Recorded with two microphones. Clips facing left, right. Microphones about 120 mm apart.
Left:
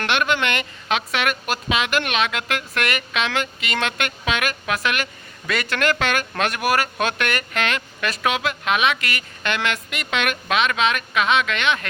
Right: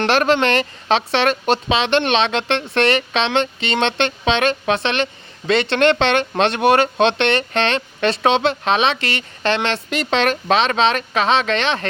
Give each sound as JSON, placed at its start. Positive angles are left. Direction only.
{"t": 0.0, "sound": "speech", "side_deg": -35}